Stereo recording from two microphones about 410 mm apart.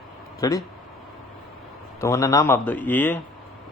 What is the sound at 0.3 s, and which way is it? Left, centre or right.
Speech, centre.